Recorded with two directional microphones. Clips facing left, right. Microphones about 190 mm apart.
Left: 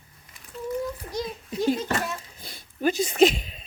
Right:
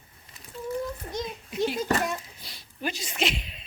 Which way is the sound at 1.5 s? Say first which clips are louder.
Left 2 dB; 40° left (ahead or behind).